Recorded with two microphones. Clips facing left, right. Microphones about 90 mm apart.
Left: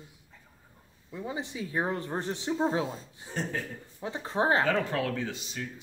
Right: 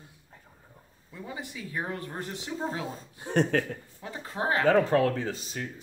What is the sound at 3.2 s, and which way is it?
Speech, 65° right (ahead or behind).